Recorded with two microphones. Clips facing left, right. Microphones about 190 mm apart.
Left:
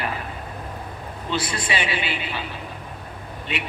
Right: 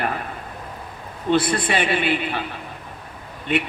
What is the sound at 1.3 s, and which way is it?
A man's voice, 55° right (ahead or behind).